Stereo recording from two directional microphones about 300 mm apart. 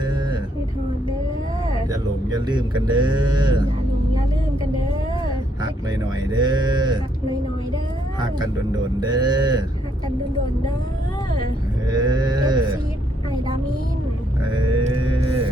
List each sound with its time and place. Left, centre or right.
1.9 s speech: centre
6.3 s speech: centre
9.0 s speech: centre
11.9 s speech: centre
14.5 s grunt: centre